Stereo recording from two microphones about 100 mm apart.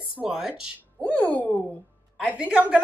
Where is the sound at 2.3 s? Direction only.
15° right (ahead or behind).